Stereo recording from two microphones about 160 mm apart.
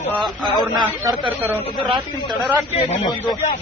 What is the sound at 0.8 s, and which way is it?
Speech, 30° right (ahead or behind).